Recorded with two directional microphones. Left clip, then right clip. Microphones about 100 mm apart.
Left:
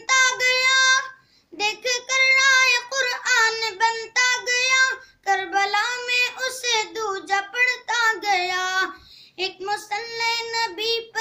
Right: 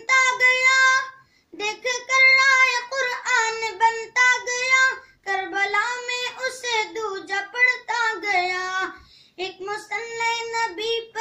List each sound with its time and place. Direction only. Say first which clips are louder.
0.0 s child singing: right 1 dB; 10° left (ahead or behind)